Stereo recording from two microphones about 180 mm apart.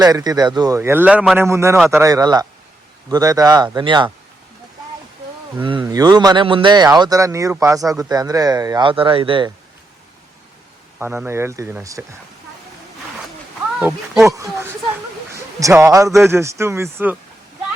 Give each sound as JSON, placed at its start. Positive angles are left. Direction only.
{"t": 0.0, "sound": "speech", "side_deg": -20}
{"t": 0.8, "sound": "speech", "side_deg": -10}
{"t": 1.4, "sound": "speech", "side_deg": -15}
{"t": 5.5, "sound": "speech", "side_deg": -25}
{"t": 11.0, "sound": "speech", "side_deg": -15}
{"t": 13.7, "sound": "speech", "side_deg": -5}
{"t": 15.6, "sound": "speech", "side_deg": -15}